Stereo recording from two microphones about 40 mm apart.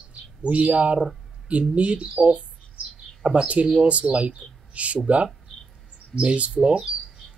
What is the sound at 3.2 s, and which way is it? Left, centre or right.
Speech, right.